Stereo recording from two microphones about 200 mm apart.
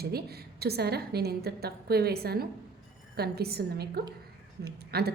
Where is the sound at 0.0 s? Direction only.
50° right (ahead or behind).